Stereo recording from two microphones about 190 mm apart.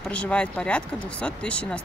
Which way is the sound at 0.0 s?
5° left (ahead or behind).